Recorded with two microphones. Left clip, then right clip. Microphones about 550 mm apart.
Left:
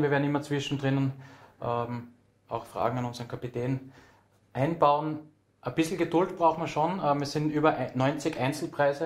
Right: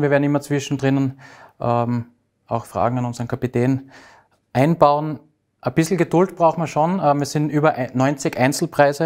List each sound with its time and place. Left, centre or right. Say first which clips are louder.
0.0 s speech: right 9 dB; right
1.6 s speech: right 11 dB; right
5.6 s speech: right 9 dB; right